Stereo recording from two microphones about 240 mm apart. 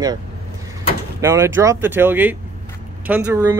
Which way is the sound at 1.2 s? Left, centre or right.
Centre.